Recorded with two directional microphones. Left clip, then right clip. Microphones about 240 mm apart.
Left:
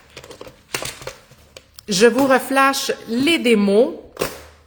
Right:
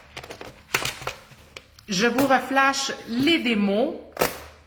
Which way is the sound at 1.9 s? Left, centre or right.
Left.